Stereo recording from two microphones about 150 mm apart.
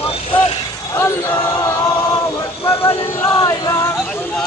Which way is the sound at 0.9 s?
15° left (ahead or behind).